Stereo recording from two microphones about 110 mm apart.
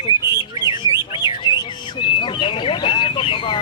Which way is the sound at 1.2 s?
50° left (ahead or behind).